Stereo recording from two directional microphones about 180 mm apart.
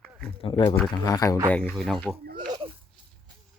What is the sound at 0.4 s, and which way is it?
Speech, 30° left (ahead or behind).